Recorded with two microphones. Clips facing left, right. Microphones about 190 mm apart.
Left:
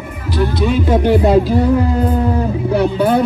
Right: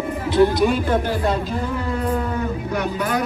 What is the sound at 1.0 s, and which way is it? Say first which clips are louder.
Speech: left 10 dB; 25° left (ahead or behind).